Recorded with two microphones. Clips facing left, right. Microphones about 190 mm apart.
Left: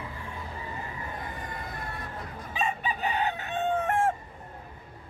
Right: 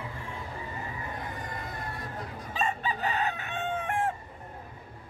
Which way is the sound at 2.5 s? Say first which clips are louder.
Even; 20° left (ahead or behind).